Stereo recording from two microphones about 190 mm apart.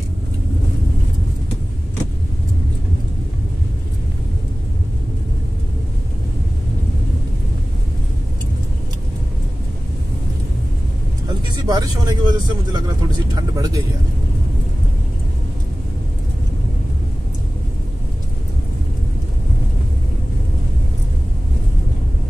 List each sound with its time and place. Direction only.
11.2 s speech: 20° right (ahead or behind)